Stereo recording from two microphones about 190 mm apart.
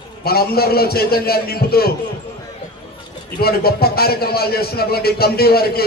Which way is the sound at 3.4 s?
55° left (ahead or behind).